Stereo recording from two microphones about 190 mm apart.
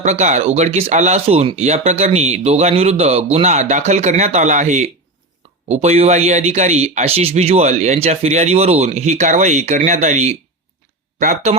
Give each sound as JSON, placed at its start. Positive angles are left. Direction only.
{"t": 0.0, "sound": "speech", "side_deg": -35}